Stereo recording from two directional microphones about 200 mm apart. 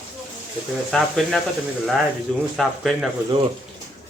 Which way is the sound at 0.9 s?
Centre (ahead or behind).